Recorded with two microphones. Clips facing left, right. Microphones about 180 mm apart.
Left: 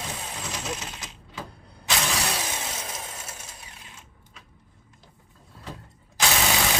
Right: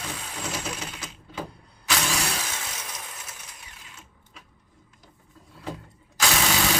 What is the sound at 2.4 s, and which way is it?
Vehicle, 20° left (ahead or behind).